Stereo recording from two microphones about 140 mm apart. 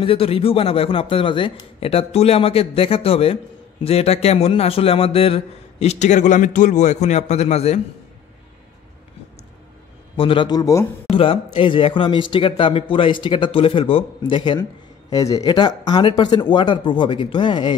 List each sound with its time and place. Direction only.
0.0 s a man's voice: 40° left (ahead or behind)
10.1 s a man's voice: 40° left (ahead or behind); by 10.9 s 25° left (ahead or behind)
11.1 s a man's voice: 40° left (ahead or behind)
14.6 s a man's voice: 25° left (ahead or behind)